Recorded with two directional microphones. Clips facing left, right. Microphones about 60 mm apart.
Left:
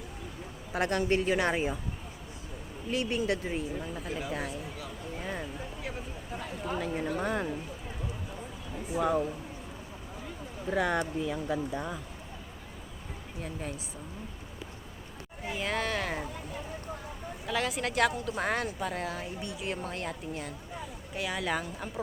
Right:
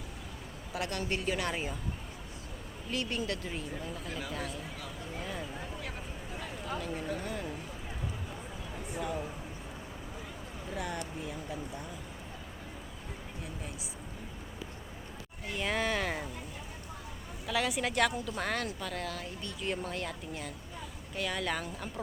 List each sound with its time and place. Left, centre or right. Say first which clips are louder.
0.7 s a woman's voice: left 7 dB; left
2.9 s speech: left 5 dB; left
6.7 s speech: left 5 dB; left
10.8 s speech: left 9 dB; left
13.4 s speech: left 8 dB; left
15.4 s speech: even; centre
17.4 s speech: even; centre
18.3 s speech: left 3 dB; centre
19.6 s speech: right 1 dB; centre